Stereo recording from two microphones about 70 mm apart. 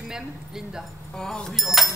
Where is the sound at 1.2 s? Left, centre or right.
Centre.